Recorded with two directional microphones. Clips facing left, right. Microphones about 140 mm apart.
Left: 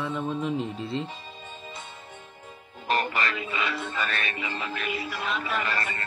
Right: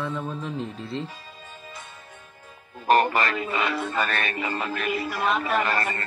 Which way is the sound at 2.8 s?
50° right (ahead or behind).